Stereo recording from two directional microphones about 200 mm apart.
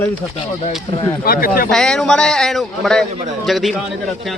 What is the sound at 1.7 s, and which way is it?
A man's voice, 5° left (ahead or behind).